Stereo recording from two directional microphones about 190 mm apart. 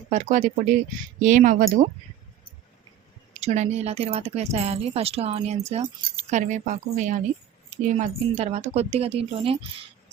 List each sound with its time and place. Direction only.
0.1 s speech: 40° right (ahead or behind)
3.4 s speech: 35° right (ahead or behind)